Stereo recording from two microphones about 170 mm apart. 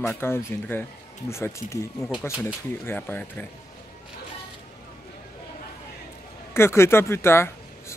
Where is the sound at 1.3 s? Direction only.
15° left (ahead or behind).